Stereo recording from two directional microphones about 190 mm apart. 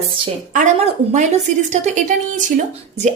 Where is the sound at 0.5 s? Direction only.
45° right (ahead or behind).